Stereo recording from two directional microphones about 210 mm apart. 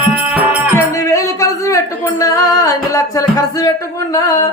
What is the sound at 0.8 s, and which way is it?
Music, 15° left (ahead or behind).